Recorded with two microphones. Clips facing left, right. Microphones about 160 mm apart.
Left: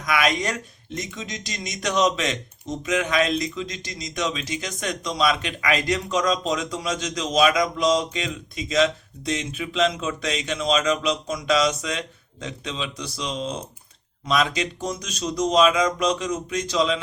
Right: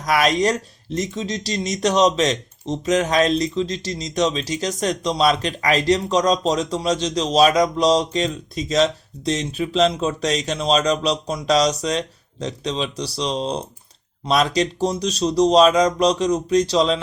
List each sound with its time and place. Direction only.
0.0 s speech: 35° right (ahead or behind)